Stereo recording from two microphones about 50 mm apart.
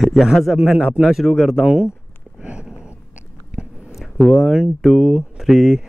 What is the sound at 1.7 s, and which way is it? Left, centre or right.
Speech, centre.